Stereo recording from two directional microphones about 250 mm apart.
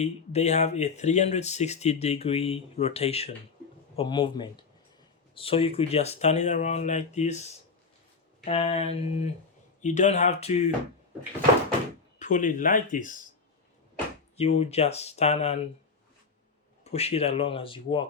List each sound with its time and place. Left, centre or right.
0.0 s speech: left
12.2 s speech: left
14.3 s speech: left
16.8 s speech: left